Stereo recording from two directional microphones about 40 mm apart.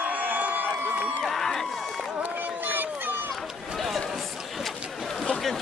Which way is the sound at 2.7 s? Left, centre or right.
Right.